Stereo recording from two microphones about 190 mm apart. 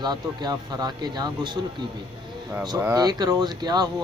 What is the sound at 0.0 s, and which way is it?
Speech, 20° right (ahead or behind).